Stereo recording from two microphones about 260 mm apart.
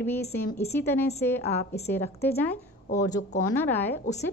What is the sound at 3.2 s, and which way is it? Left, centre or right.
Speech, left.